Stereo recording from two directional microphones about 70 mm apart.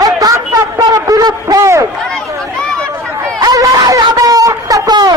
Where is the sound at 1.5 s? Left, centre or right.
Right.